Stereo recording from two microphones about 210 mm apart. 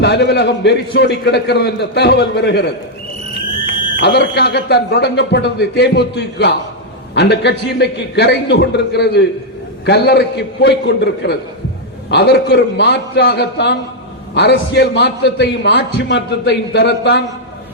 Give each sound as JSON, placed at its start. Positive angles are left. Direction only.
{"t": 0.0, "sound": "a man's voice", "side_deg": 50}
{"t": 3.7, "sound": "fire alarm", "side_deg": -40}
{"t": 4.0, "sound": "a man's voice", "side_deg": 50}